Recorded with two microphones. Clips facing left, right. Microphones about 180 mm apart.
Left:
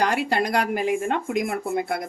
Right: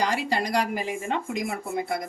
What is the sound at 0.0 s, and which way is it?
Speech, 60° left (ahead or behind).